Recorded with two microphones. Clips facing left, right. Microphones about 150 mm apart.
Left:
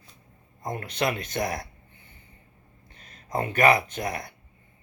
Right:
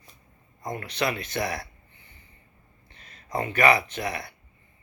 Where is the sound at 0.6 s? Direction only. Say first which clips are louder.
Left 1 dB; 50° left (ahead or behind).